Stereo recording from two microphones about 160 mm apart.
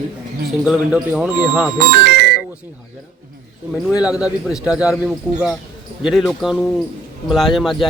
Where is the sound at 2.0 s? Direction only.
85° right.